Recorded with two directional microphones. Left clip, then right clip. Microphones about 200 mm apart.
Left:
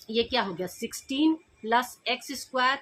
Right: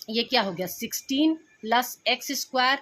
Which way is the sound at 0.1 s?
40° right (ahead or behind).